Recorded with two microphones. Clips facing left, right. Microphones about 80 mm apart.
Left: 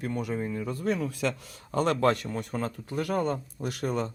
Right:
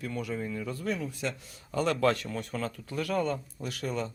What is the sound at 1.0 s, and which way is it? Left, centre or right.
Speech, left.